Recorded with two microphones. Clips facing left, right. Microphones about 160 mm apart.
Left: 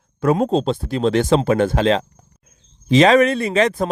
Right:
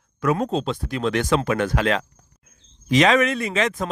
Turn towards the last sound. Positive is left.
turn(degrees=35)  # may be behind; listen again after turning